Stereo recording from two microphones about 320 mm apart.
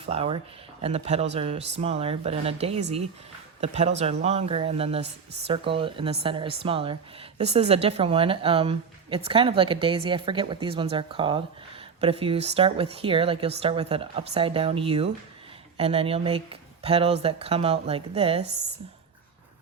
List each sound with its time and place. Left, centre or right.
0.0 s speech: centre